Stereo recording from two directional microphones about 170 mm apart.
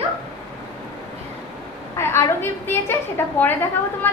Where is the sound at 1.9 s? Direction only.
15° left (ahead or behind).